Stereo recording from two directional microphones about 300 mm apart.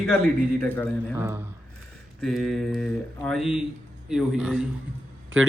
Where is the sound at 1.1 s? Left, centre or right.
Centre.